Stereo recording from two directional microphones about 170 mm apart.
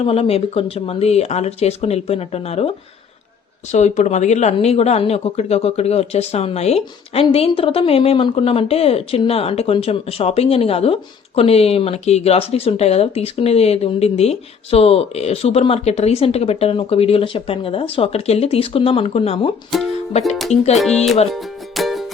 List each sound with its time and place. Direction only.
0.0 s speech: 35° left (ahead or behind)
20.7 s music: centre (ahead or behind)